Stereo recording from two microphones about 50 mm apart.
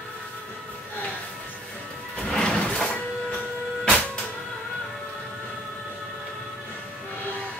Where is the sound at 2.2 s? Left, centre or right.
Centre.